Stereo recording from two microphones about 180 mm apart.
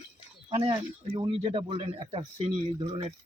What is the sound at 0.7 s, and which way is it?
Speech, 25° right (ahead or behind).